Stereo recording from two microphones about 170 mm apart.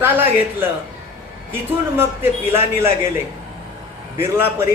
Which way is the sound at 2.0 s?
15° right (ahead or behind).